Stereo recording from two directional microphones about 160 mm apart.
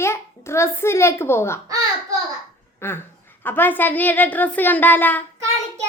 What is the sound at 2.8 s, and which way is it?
A child's voice, 15° left (ahead or behind).